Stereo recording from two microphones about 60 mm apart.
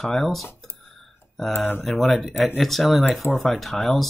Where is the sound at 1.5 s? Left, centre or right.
Left.